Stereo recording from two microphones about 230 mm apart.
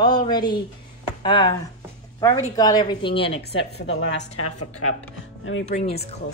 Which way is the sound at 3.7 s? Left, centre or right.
Left.